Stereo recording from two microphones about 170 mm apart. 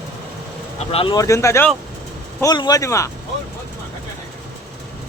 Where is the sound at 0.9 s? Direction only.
35° left (ahead or behind).